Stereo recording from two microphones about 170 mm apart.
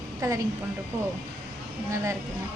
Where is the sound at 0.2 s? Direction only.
20° right (ahead or behind).